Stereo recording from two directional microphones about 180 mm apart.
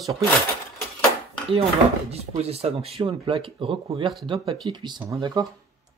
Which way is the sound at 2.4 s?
35° right (ahead or behind).